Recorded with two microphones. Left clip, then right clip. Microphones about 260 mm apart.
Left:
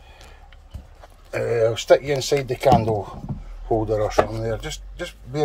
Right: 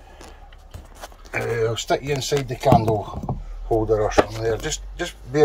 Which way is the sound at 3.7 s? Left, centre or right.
Left.